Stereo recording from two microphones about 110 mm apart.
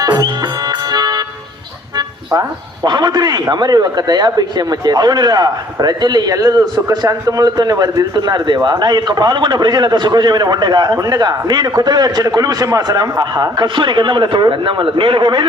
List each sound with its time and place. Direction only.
0.0 s music: 35° right (ahead or behind)
2.0 s speech: 35° right (ahead or behind)